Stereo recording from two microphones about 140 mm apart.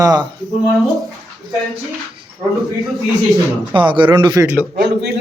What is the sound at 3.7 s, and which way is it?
Speech, 35° right (ahead or behind).